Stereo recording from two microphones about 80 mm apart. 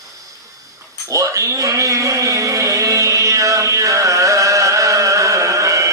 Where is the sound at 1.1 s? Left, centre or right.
Right.